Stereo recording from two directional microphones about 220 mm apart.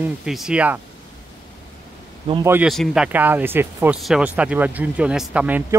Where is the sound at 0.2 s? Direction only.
Centre (ahead or behind).